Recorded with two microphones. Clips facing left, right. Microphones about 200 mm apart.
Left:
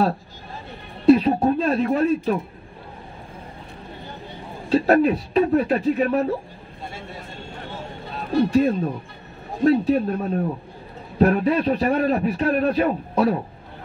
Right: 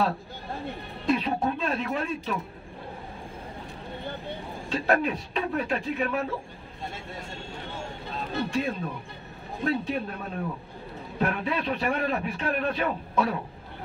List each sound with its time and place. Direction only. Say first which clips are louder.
1.0 s a sound: left 11 dB; 40° left (ahead or behind)
4.6 s a man's voice: left 9 dB; 40° left (ahead or behind)
8.5 s a man's voice: left 10 dB; 40° left (ahead or behind)